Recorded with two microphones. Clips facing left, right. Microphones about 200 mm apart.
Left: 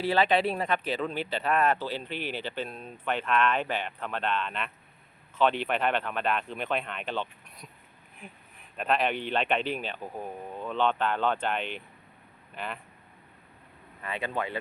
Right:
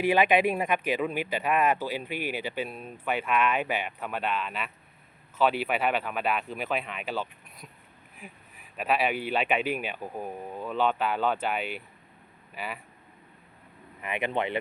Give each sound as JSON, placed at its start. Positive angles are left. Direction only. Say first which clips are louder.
{"t": 0.0, "sound": "speech", "louder": "right 2 dB", "side_deg": -15}
{"t": 14.0, "sound": "speech", "louder": "right 3 dB", "side_deg": -20}